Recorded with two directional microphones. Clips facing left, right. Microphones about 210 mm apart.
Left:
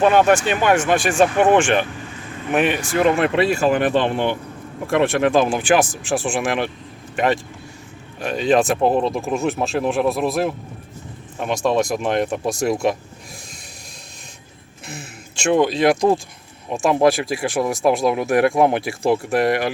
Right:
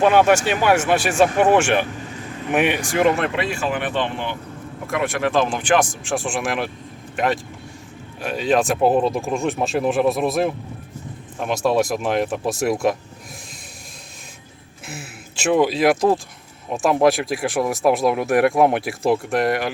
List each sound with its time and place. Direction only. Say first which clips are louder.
0.0 s speech: even; 10° right (ahead or behind)
3.3 s speech: left 6 dB; 35° left (ahead or behind)
5.3 s speech: left 2 dB; 10° left (ahead or behind)
8.2 s speech: left 2 dB; 5° right (ahead or behind)
14.8 s speech: even; 5° right (ahead or behind)